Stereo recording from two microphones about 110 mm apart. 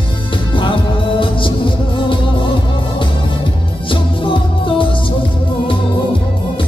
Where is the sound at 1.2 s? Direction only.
50° left (ahead or behind).